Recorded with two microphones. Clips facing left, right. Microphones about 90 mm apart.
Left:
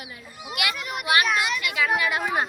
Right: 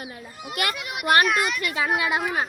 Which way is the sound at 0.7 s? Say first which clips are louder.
Left 1 dB; centre (ahead or behind).